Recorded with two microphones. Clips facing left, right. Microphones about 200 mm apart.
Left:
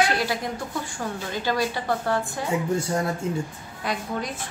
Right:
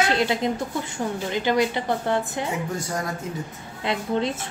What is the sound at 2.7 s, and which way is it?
Speech, 25° left (ahead or behind).